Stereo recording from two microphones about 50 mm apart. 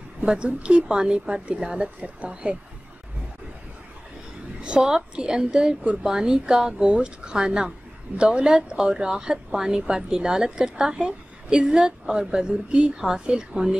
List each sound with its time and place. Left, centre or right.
0.2 s a woman's voice: centre
4.6 s a woman's voice: centre